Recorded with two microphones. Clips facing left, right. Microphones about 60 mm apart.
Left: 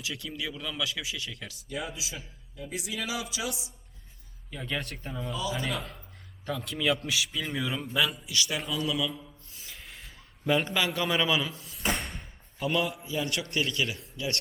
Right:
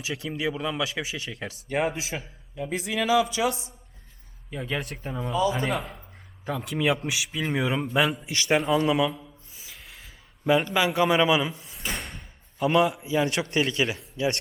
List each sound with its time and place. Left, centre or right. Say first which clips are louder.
0.0 s speech: right 7 dB; right
1.6 s speech: right 10 dB; right
4.6 s speech: right 3 dB; centre
5.3 s speech: right 8 dB; right
9.6 s a sound: even; centre
10.4 s a man's voice: right 5 dB; centre
11.9 s door: left 3 dB; centre
12.6 s speech: right 7 dB; centre